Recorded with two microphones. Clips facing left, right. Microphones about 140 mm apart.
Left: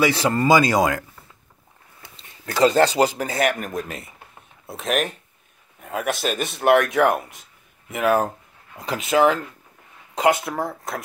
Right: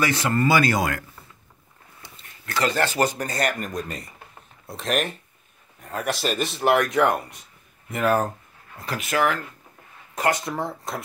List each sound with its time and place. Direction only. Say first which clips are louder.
0.0 s speech: left 3 dB; 15° left (ahead or behind)
2.5 s speech: left 7 dB; 30° left (ahead or behind)
3.0 s speech: left 4 dB; 10° left (ahead or behind)
8.7 s speech: left 5 dB; 25° left (ahead or behind)
10.1 s speech: left 4 dB; 15° left (ahead or behind)